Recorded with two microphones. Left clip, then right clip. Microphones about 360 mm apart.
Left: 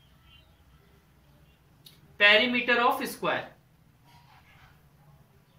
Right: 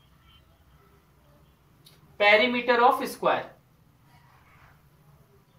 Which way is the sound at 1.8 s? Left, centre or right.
Centre.